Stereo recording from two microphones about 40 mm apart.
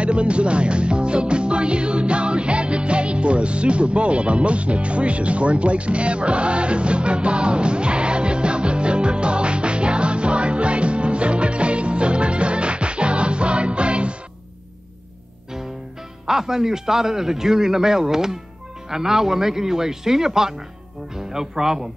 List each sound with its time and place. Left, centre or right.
0.0 s music: right
16.3 s a man's voice: centre